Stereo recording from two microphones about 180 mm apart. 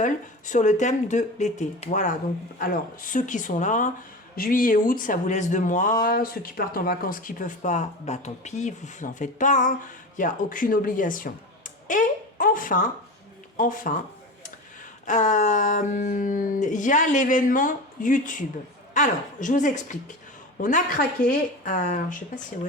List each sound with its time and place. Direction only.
0.0 s speech: 45° left (ahead or behind)
15.0 s speech: 45° left (ahead or behind)